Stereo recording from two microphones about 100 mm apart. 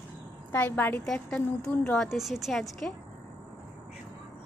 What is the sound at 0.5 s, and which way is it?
Speech, 20° left (ahead or behind).